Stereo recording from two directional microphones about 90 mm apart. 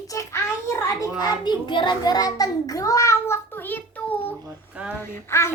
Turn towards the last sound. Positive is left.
turn(degrees=30)  # may be behind; listen again after turning